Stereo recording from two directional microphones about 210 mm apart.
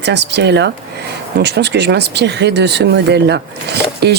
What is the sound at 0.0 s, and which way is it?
Speech, 55° right (ahead or behind).